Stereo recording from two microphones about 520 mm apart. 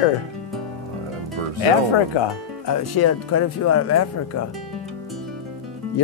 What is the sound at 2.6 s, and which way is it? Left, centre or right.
Speech, left.